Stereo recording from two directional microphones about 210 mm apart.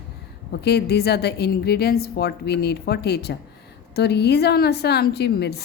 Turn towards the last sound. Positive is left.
turn(degrees=50)  # may be behind; listen again after turning